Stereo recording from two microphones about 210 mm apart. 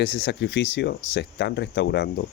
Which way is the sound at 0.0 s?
55° left (ahead or behind).